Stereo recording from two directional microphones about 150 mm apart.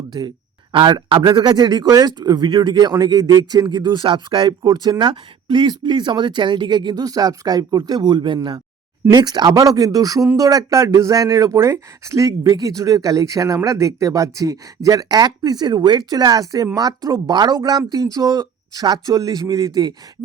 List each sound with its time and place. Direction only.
0.1 s speech: 25° right (ahead or behind)